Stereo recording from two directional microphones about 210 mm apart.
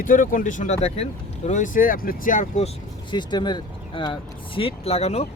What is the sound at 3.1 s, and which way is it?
Speech, 20° left (ahead or behind).